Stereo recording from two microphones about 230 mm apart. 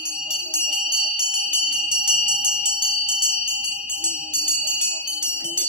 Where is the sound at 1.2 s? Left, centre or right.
Centre.